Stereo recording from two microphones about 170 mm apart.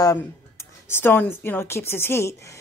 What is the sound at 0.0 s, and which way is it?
Speech, 15° left (ahead or behind).